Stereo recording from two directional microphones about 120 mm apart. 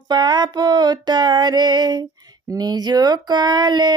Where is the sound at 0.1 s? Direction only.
35° right (ahead or behind).